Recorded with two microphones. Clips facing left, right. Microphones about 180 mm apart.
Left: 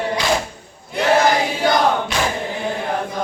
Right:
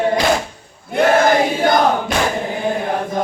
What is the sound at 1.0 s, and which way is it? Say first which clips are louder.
Choir: right 3 dB; 50° right (ahead or behind).